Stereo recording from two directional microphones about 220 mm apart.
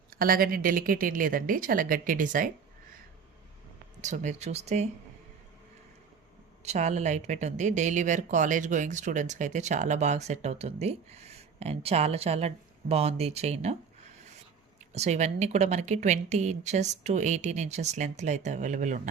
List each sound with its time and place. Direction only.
0.1 s speech: 40° right (ahead or behind)
4.0 s speech: 35° right (ahead or behind)
6.6 s speech: 30° right (ahead or behind)
14.9 s speech: 30° right (ahead or behind)